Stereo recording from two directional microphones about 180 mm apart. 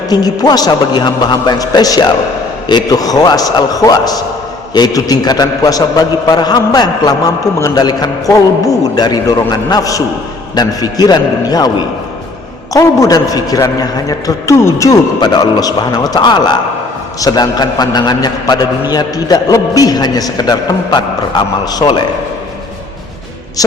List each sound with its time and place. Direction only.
0.1 s a man's voice: 20° left (ahead or behind)
12.7 s a man's voice: 20° left (ahead or behind)